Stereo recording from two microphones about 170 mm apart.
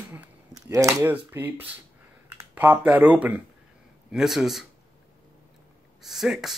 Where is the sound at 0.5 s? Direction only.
20° right (ahead or behind).